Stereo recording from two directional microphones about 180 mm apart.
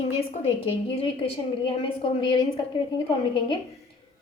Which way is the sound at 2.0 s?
30° left (ahead or behind).